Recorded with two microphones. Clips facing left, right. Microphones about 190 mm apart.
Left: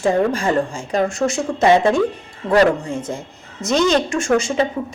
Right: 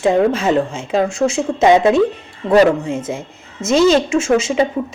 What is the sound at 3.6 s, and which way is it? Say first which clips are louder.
Speech: right 4 dB; centre (ahead or behind).